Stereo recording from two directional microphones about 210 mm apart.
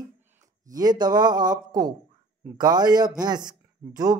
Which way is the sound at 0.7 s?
20° right (ahead or behind).